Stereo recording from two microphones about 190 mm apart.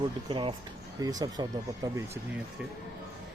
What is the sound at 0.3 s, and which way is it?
Speech, 25° right (ahead or behind).